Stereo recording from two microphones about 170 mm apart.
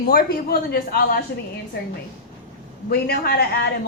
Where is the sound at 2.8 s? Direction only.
70° left (ahead or behind).